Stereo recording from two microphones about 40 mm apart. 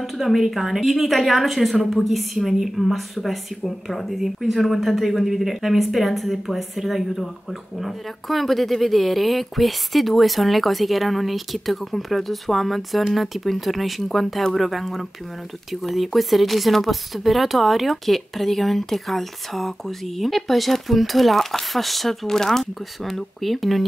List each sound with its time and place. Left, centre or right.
0.0 s a woman's voice: centre